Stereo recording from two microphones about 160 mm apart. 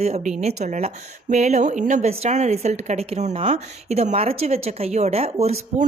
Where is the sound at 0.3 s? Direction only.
45° right (ahead or behind).